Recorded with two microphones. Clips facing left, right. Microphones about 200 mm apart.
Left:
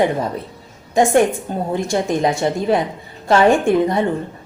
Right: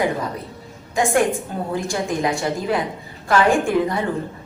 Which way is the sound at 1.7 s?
25° left (ahead or behind).